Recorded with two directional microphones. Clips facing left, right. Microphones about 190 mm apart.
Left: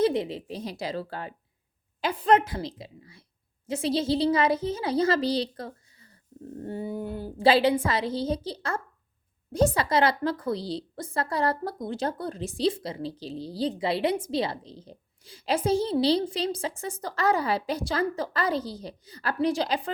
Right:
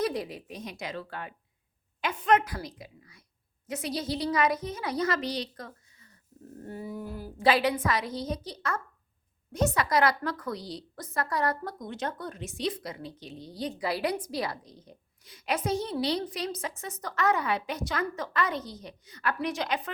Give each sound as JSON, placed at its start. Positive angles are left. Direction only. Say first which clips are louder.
{"t": 0.0, "sound": "a woman's voice", "louder": "left 6 dB", "side_deg": 25}